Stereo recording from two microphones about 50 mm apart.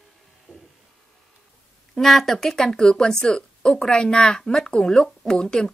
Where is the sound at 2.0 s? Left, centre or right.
Centre.